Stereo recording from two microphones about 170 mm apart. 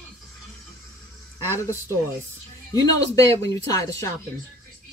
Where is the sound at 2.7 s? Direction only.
15° left (ahead or behind).